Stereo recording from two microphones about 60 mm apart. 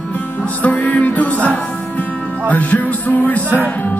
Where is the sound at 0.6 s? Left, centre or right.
Left.